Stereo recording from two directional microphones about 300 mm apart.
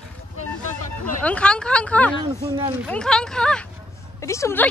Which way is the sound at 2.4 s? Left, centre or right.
Centre.